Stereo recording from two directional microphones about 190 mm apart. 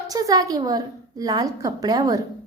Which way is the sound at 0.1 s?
20° right (ahead or behind).